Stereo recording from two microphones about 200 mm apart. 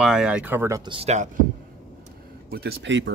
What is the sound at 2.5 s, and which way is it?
Speech, 55° right (ahead or behind).